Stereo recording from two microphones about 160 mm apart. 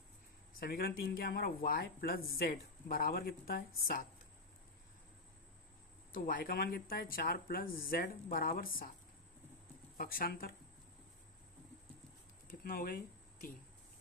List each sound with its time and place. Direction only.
0.6 s speech: 75° left (ahead or behind)
6.1 s speech: 65° left (ahead or behind)
10.0 s speech: 65° left (ahead or behind)
12.5 s speech: 65° left (ahead or behind)